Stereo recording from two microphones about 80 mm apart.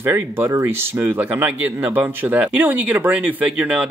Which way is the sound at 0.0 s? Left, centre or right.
Right.